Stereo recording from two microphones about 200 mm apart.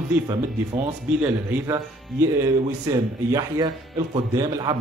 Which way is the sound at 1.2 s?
15° right (ahead or behind).